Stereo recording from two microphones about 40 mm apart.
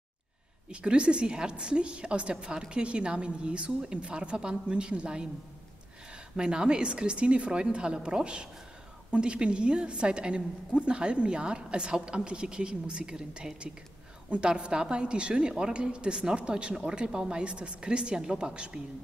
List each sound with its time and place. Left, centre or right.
0.7 s a woman's voice: right
6.3 s a woman's voice: right